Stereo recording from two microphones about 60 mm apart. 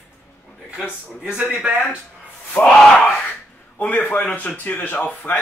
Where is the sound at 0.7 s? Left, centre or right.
Centre.